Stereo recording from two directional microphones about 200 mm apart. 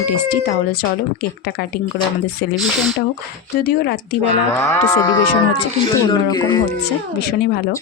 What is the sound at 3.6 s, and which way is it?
Speech, 50° left (ahead or behind).